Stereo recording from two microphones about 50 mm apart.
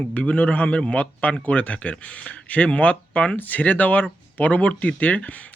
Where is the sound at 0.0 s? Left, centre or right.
Left.